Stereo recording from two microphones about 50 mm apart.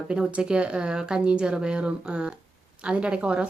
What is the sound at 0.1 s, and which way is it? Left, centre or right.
A woman's voice, right.